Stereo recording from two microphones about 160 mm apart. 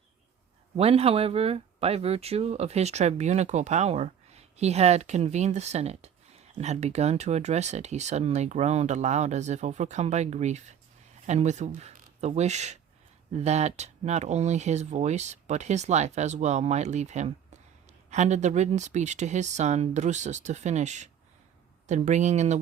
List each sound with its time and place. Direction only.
0.8 s speech: 40° right (ahead or behind)